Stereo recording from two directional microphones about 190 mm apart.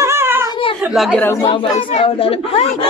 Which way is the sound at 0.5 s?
25° left (ahead or behind).